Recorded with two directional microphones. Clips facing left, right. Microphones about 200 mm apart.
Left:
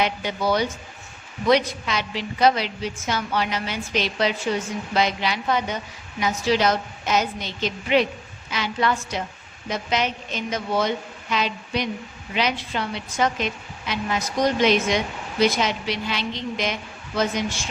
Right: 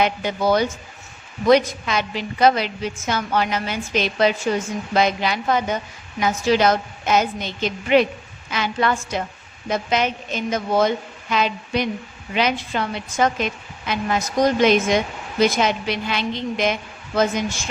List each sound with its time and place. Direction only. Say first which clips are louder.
0.0 s a woman's voice: right 3 dB; 50° right (ahead or behind)